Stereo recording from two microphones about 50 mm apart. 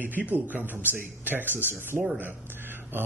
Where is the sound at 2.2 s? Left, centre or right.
Right.